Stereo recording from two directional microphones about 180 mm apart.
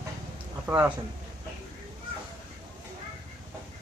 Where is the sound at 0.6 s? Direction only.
15° right (ahead or behind).